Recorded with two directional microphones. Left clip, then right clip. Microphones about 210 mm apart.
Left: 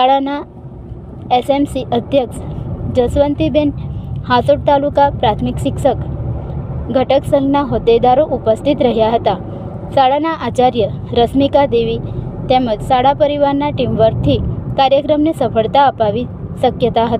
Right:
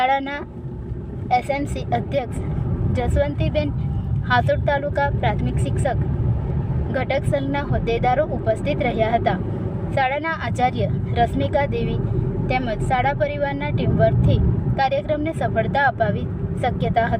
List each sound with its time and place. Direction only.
0.0 s speech: 20° left (ahead or behind)
6.9 s speech: 25° left (ahead or behind)